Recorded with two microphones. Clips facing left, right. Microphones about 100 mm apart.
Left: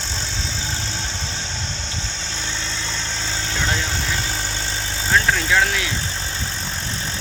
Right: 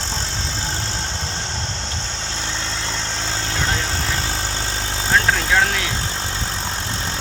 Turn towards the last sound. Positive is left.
turn(degrees=-50)  # may be behind; listen again after turning